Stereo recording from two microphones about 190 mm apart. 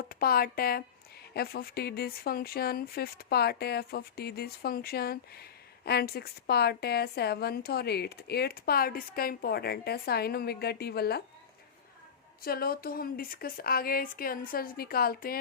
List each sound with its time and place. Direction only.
0.1 s speech: 50° left (ahead or behind)
12.4 s speech: 50° left (ahead or behind)